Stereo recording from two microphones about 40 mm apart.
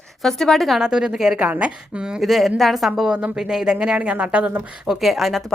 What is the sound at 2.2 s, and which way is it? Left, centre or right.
Speech, centre.